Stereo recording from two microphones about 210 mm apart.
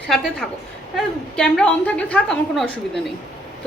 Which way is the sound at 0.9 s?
5° left (ahead or behind).